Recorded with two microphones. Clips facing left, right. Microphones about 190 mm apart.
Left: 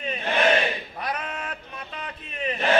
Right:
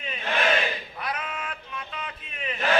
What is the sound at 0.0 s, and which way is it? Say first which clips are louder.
Battle cry: left 4 dB; 35° left (ahead or behind).